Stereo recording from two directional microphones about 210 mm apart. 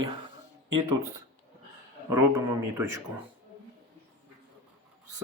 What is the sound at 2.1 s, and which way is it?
Speech, 10° right (ahead or behind).